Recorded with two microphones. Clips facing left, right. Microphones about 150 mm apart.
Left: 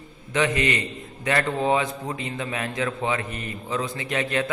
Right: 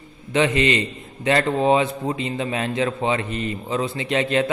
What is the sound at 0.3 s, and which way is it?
A man's voice, 20° right (ahead or behind).